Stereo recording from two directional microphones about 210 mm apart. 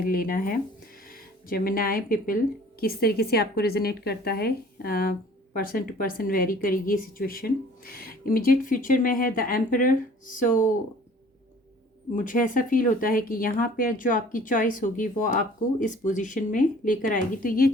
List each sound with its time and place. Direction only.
0.0 s a woman's voice: 45° left (ahead or behind)
12.1 s speech: 40° left (ahead or behind)